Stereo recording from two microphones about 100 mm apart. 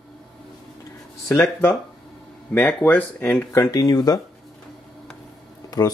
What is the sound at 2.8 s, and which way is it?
Speech, 20° left (ahead or behind).